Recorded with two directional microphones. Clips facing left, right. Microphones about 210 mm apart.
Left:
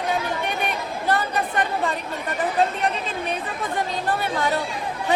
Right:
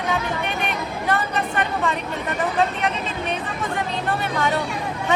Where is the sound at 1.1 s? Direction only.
30° left (ahead or behind).